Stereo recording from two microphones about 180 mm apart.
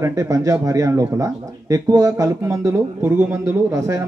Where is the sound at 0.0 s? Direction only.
20° right (ahead or behind).